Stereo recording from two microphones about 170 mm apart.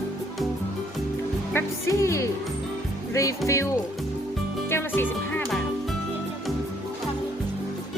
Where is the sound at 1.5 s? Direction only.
15° left (ahead or behind).